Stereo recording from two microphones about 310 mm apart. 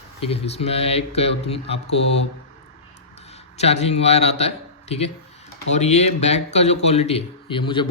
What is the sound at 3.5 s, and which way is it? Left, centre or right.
A man's voice, left.